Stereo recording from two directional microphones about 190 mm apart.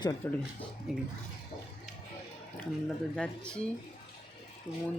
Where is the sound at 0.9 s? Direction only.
Centre (ahead or behind).